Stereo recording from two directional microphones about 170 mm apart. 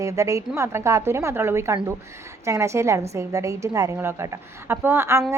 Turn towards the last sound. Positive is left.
turn(degrees=-15)  # may be behind; listen again after turning